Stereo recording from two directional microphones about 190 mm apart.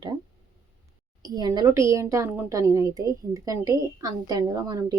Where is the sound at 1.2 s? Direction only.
20° right (ahead or behind).